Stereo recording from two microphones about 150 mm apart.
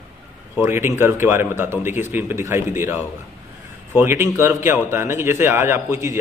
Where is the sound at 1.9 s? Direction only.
55° left (ahead or behind).